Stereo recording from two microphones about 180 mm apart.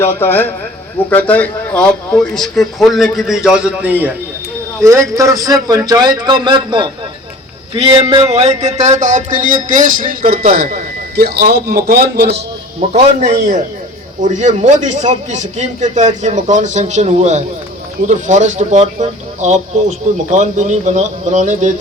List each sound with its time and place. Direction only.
0.0 s speech: 15° left (ahead or behind); by 3.9 s 5° right (ahead or behind)
4.8 s a man's voice: 15° right (ahead or behind); by 12.4 s 65° right (ahead or behind)
12.9 s a man's voice: 40° right (ahead or behind)